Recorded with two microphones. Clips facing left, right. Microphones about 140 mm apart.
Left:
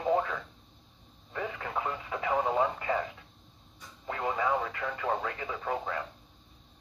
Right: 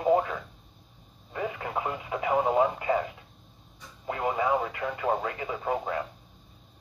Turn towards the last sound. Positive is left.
turn(degrees=-10)  # may be behind; listen again after turning